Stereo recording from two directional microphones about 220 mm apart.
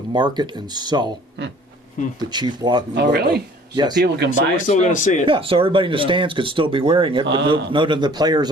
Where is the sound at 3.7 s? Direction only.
20° right (ahead or behind).